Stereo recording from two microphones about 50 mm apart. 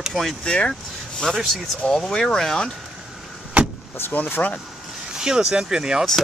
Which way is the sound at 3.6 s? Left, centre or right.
Right.